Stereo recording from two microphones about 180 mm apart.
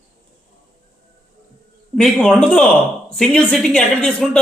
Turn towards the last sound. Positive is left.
turn(degrees=5)  # may be behind; listen again after turning